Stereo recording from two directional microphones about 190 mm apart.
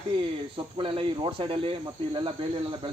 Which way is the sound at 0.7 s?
25° right (ahead or behind).